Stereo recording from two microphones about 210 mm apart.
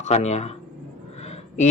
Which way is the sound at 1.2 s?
30° left (ahead or behind).